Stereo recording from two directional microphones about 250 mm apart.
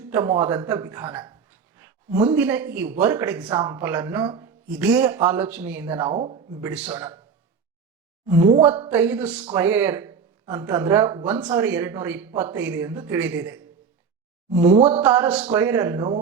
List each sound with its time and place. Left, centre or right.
0.0 s speech: centre
6.1 s speech: right
6.6 s a man's voice: centre
8.3 s speech: centre